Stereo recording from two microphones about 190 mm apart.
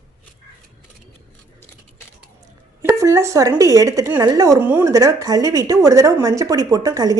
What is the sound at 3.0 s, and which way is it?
A woman's voice, 15° right (ahead or behind).